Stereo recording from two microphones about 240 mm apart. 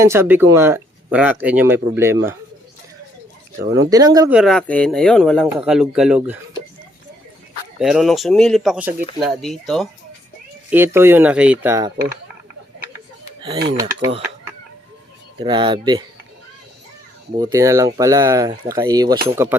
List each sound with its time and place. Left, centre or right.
0.0 s speech: centre
3.6 s speech: centre
4.4 s speech: centre
7.8 s speech: centre
13.7 s speech: centre
17.3 s speech: centre